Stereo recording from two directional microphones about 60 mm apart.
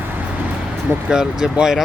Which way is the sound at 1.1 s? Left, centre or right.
Centre.